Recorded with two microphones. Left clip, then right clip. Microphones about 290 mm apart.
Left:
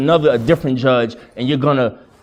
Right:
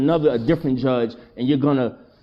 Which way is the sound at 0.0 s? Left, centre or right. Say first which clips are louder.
Left 5 dB; left.